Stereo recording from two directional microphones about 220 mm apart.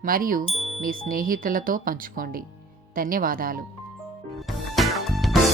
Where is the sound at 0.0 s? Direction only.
40° right (ahead or behind).